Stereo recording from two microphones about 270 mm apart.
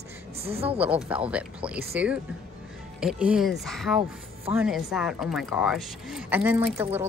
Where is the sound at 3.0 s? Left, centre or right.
Centre.